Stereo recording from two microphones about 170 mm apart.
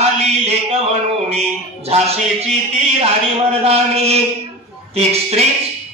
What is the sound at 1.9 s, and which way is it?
Speech, 35° right (ahead or behind).